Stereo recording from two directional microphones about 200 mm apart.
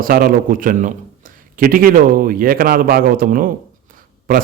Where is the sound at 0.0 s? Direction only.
45° right (ahead or behind).